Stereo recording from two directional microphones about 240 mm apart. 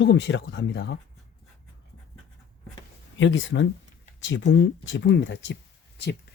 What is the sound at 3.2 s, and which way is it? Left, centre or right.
Speech, left.